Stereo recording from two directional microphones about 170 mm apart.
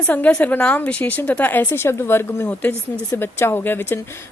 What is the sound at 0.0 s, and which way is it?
A woman's voice, 10° left (ahead or behind).